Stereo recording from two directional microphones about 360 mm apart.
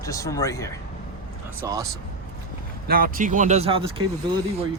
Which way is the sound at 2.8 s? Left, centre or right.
Right.